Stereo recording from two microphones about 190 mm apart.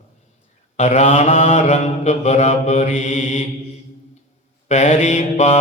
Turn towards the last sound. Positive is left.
turn(degrees=35)  # may be behind; listen again after turning